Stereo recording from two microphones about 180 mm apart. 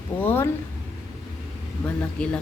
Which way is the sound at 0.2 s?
10° left (ahead or behind).